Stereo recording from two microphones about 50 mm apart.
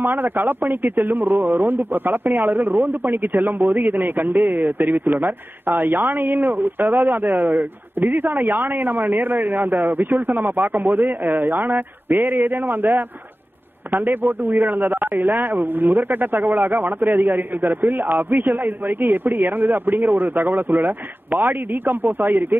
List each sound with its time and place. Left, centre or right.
0.0 s speech: right